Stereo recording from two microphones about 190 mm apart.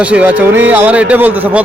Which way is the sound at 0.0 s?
5° right (ahead or behind).